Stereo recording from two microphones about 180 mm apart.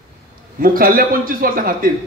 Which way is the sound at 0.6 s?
55° right (ahead or behind).